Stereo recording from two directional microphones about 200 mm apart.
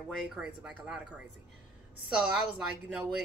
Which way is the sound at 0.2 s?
5° right (ahead or behind).